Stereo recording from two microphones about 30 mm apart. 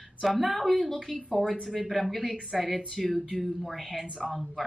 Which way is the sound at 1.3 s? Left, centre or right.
Left.